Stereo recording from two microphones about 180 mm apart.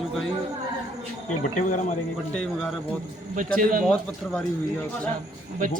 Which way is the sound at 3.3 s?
50° right (ahead or behind).